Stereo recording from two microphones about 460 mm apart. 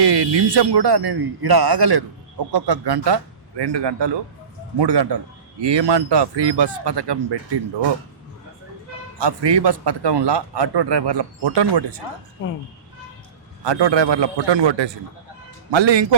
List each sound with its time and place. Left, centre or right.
0.0 s a man's voice: right
9.1 s a man's voice: right
13.7 s a man's voice: right